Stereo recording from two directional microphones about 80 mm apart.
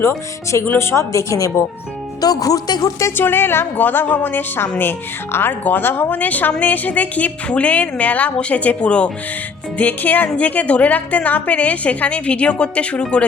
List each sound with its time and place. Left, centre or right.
0.0 s speech: left
2.2 s speech: left
3.2 s a woman's voice: left